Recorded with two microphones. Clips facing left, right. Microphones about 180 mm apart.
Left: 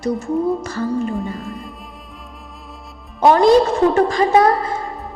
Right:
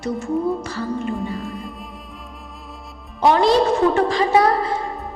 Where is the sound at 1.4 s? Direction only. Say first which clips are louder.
Even; centre (ahead or behind).